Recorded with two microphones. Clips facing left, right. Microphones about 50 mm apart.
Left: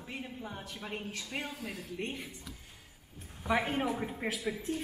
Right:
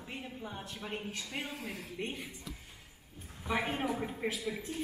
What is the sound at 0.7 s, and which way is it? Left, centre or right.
Speech, centre.